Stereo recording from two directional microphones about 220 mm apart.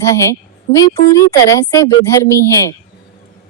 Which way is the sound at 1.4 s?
15° left (ahead or behind).